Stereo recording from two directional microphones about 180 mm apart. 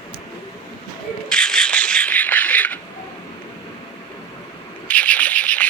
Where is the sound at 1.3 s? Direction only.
5° left (ahead or behind).